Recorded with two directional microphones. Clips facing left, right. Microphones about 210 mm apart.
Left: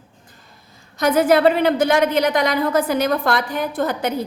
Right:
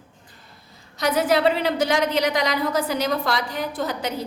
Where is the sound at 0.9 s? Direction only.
50° left (ahead or behind).